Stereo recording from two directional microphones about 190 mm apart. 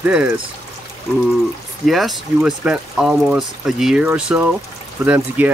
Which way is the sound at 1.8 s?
Centre (ahead or behind).